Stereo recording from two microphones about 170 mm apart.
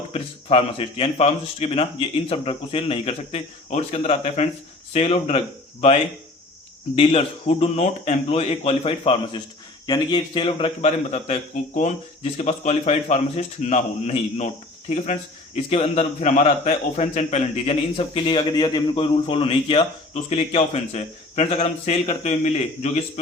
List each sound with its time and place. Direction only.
0.1 s a man's voice: 35° left (ahead or behind)
6.9 s a man's voice: 35° left (ahead or behind)